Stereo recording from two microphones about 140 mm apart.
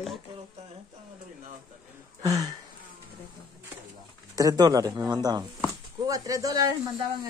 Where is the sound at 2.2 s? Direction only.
25° right (ahead or behind).